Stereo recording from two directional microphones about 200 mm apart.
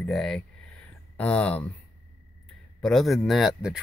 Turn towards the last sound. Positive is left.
turn(degrees=0)  # may be behind; listen again after turning